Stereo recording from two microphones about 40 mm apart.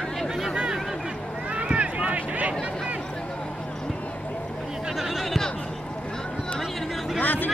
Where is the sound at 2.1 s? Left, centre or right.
Right.